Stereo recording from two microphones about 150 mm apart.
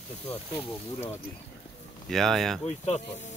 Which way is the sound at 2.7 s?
50° left (ahead or behind).